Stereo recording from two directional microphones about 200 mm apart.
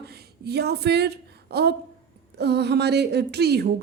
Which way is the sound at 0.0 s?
55° right (ahead or behind).